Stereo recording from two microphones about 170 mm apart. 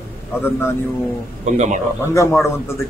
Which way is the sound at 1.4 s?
45° right (ahead or behind).